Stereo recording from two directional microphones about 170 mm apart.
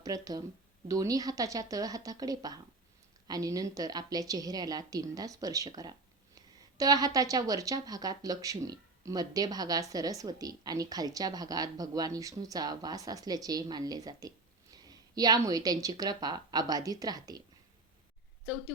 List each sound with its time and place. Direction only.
0.0 s a woman's voice: 20° right (ahead or behind)